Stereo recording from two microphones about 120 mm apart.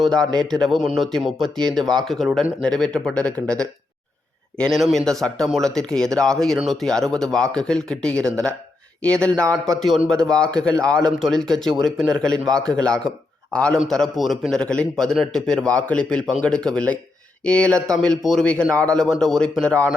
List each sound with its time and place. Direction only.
0.6 s a man's voice: centre (ahead or behind)
10.8 s a man's voice: 30° right (ahead or behind)
11.2 s a man's voice: 5° left (ahead or behind)